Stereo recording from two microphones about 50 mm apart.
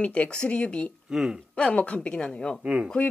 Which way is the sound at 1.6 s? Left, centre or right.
Left.